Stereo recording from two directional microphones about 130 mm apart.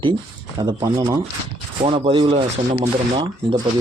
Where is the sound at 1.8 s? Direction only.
40° right (ahead or behind).